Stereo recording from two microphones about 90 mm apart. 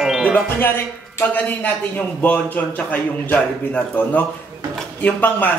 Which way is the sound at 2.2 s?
15° left (ahead or behind).